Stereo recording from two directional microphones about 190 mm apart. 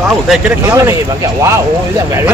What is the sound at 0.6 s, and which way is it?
Speech, 15° right (ahead or behind).